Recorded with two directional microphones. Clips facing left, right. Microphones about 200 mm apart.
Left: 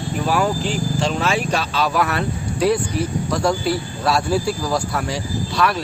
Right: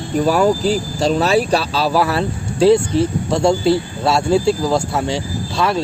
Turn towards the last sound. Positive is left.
turn(degrees=-25)  # may be behind; listen again after turning